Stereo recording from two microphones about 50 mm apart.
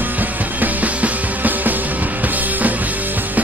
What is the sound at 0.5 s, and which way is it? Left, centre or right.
Music, right.